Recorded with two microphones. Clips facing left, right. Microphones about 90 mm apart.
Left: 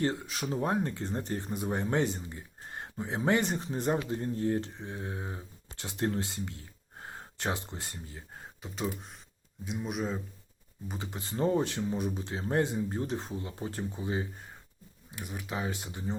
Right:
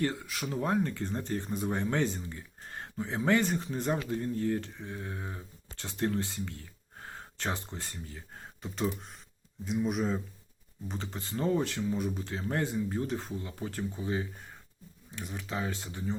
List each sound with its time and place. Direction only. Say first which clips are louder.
0.0 s speech: left 1 dB; 25° left (ahead or behind)
8.4 s a sound: right 3 dB; 5° left (ahead or behind)
9.8 s speech: right 3 dB; centre (ahead or behind)
10.8 s speech: even; 15° left (ahead or behind)